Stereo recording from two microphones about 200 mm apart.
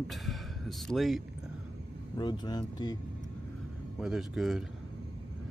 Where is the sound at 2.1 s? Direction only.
20° left (ahead or behind).